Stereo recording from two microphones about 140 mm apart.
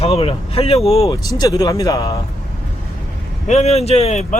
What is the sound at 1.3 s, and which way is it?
Speech, 25° left (ahead or behind).